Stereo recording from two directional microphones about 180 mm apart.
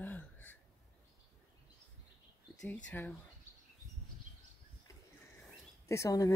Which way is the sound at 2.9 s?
10° left (ahead or behind).